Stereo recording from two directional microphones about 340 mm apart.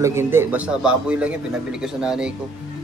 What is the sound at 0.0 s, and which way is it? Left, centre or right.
A man's voice, centre.